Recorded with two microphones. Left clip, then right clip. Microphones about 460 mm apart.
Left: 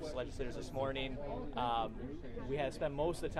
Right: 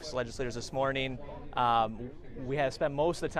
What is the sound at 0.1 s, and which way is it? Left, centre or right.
Speech, right.